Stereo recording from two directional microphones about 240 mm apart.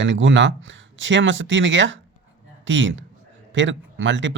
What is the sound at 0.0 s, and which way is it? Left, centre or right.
Speech, right.